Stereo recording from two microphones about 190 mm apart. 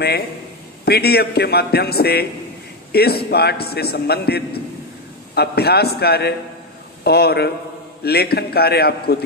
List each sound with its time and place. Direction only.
0.8 s a man's voice: 55° left (ahead or behind)